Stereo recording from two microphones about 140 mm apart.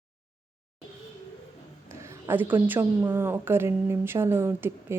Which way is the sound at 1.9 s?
20° right (ahead or behind).